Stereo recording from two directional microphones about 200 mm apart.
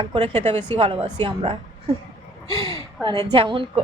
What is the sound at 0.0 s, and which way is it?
A woman's voice, 30° right (ahead or behind).